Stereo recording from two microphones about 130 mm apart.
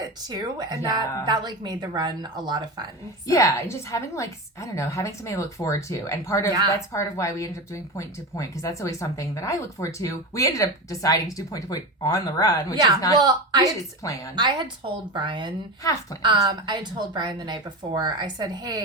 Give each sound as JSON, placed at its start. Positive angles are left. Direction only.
{"t": 0.0, "sound": "a woman's voice", "side_deg": -30}
{"t": 3.2, "sound": "speech", "side_deg": 25}
{"t": 12.7, "sound": "a woman's voice", "side_deg": -30}